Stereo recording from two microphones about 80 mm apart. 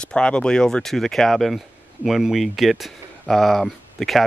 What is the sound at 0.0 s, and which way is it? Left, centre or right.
Speech, centre.